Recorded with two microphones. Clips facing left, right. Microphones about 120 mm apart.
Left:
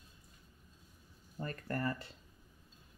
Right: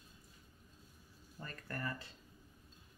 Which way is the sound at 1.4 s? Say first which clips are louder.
Left 7 dB; 35° left (ahead or behind).